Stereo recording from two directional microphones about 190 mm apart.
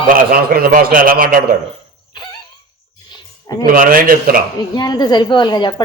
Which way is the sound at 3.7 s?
45° right (ahead or behind).